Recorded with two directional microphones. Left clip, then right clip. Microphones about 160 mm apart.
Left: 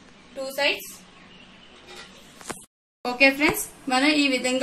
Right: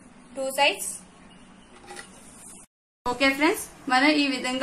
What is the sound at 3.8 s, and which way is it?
Speech, 65° left (ahead or behind).